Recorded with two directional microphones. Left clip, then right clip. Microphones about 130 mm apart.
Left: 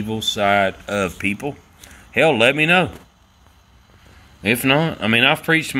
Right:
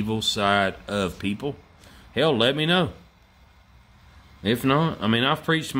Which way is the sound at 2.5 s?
15° right (ahead or behind).